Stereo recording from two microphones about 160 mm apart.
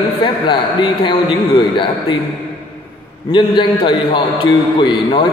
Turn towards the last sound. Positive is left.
turn(degrees=30)  # may be behind; listen again after turning